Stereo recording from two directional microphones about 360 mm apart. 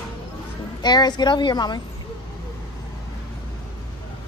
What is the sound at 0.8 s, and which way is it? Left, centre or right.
A woman's voice, centre.